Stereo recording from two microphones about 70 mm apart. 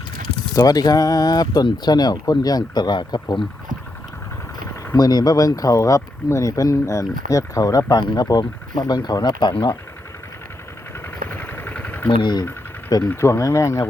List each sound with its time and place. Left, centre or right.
0.5 s speech: left
4.9 s speech: left
11.3 s vehicle: left
12.2 s speech: left
13.1 s speech: left